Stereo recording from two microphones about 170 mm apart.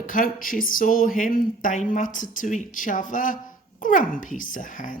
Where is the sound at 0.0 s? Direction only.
50° left (ahead or behind).